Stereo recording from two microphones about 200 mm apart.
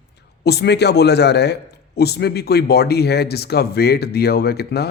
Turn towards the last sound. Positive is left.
turn(degrees=55)  # may be behind; listen again after turning